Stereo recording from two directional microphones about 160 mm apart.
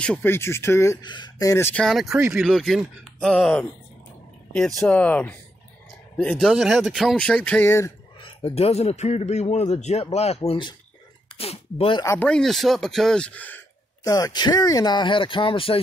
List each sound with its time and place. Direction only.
0.0 s speech: 10° left (ahead or behind)
6.3 s speech: 5° right (ahead or behind); by 7.9 s 15° left (ahead or behind)
8.2 s a man's voice: 35° left (ahead or behind)
12.0 s speech: 15° left (ahead or behind)
12.3 s speech: 5° left (ahead or behind)
14.0 s speech: 25° left (ahead or behind)